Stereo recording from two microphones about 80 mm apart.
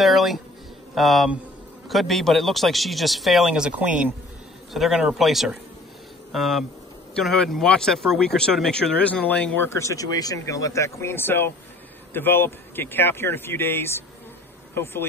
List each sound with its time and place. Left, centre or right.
0.0 s a sound: centre
0.9 s speech: centre
4.7 s speech: centre
9.6 s speech: left